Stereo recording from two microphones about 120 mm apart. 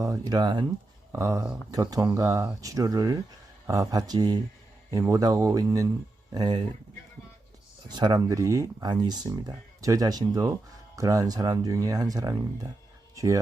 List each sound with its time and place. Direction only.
0.0 s speech: 30° right (ahead or behind)
7.9 s speech: 35° right (ahead or behind)